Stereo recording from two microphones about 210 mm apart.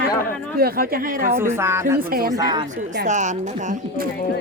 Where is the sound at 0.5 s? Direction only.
45° right (ahead or behind).